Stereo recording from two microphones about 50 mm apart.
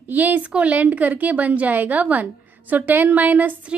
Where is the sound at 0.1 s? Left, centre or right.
Right.